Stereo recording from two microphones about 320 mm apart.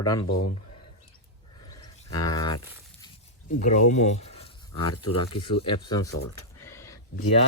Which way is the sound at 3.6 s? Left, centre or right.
Left.